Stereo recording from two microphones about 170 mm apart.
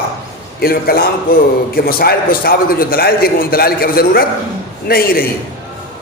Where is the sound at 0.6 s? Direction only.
65° left (ahead or behind).